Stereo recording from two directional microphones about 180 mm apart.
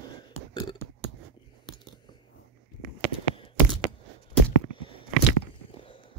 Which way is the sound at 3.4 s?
30° left (ahead or behind).